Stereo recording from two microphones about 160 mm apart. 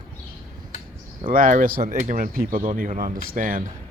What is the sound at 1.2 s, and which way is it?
Speech, 60° right (ahead or behind).